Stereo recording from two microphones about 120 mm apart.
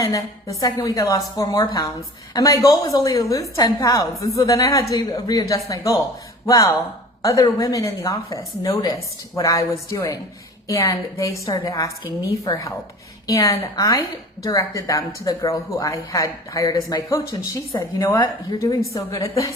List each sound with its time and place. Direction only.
0.0 s speech: 30° left (ahead or behind)